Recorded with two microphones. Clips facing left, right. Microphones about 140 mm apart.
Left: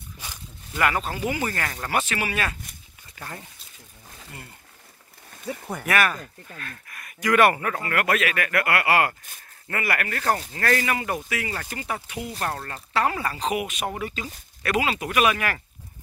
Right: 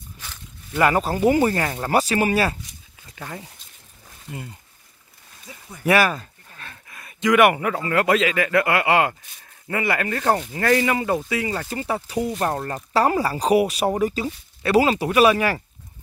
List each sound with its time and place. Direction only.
0.7 s speech: 35° right (ahead or behind)
1.5 s speech: 25° right (ahead or behind)
1.9 s speech: 35° right (ahead or behind)
3.2 s speech: 10° right (ahead or behind)
5.5 s speech: 65° left (ahead or behind)
6.6 s speech: 20° right (ahead or behind)